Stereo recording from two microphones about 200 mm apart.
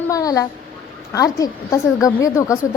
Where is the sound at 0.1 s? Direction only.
15° left (ahead or behind).